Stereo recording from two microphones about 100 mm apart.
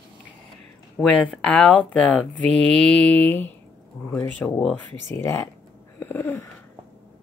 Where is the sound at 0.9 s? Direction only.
10° left (ahead or behind).